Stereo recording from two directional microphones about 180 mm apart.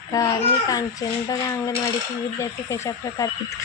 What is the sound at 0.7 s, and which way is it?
Speech, 20° left (ahead or behind).